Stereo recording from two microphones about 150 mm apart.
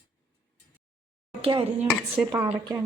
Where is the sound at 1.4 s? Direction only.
40° right (ahead or behind).